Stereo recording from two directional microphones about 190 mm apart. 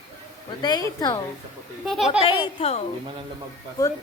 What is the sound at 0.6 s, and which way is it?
Speech, 20° left (ahead or behind).